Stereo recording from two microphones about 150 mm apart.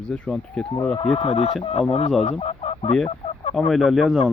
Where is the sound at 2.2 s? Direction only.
45° left (ahead or behind).